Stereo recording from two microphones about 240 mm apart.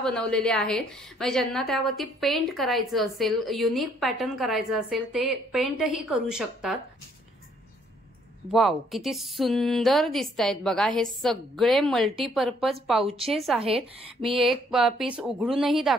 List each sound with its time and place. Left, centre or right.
0.0 s a woman's voice: centre
8.5 s a woman's voice: centre